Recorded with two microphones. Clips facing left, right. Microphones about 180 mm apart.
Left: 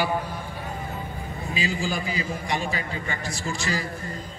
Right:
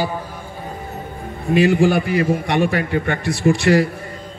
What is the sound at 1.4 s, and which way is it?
A man's voice, 60° right (ahead or behind).